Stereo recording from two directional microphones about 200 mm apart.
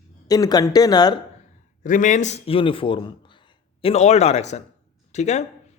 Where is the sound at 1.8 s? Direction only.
40° left (ahead or behind).